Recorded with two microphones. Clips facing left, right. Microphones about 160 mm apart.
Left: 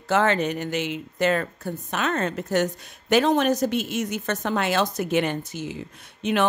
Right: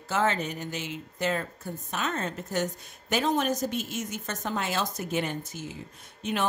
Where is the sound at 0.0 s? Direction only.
70° left (ahead or behind).